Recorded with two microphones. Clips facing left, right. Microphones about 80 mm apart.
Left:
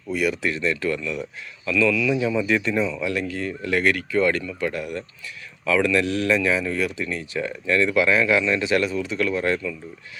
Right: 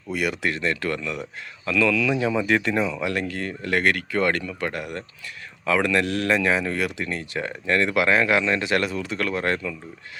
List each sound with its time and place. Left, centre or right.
0.1 s speech: right
2.1 s speech: right